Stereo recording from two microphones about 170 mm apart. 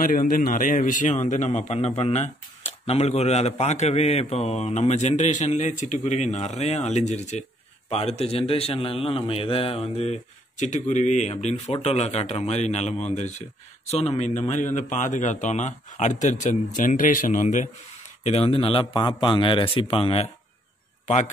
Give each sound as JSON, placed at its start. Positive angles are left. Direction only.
{"t": 0.0, "sound": "a man's voice", "side_deg": 55}